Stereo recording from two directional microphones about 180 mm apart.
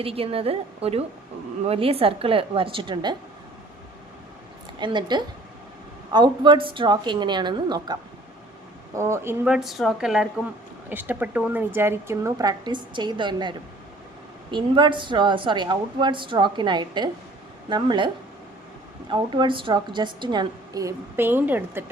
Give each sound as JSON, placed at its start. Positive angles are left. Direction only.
{"t": 0.0, "sound": "a woman's voice", "side_deg": -30}
{"t": 4.8, "sound": "a woman's voice", "side_deg": -25}
{"t": 9.0, "sound": "a woman's voice", "side_deg": -15}